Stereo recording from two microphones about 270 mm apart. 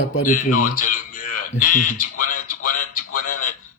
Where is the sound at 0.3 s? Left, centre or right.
Left.